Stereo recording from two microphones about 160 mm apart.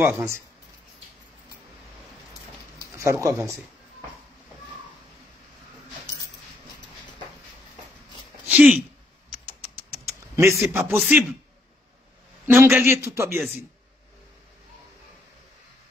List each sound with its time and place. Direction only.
0.0 s a man's voice: 15° right (ahead or behind)
3.0 s speech: 20° right (ahead or behind)
8.5 s speech: 10° right (ahead or behind)
10.6 s a man's voice: 15° right (ahead or behind)
11.0 s a man's voice: centre (ahead or behind)
12.4 s a man's voice: 15° right (ahead or behind)